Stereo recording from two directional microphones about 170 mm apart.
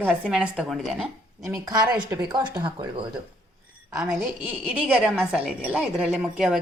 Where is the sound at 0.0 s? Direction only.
5° right (ahead or behind).